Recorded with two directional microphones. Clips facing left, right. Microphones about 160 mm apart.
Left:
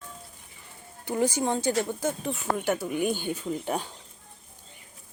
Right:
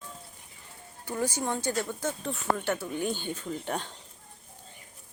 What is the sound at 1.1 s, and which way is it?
A woman's voice, 25° left (ahead or behind).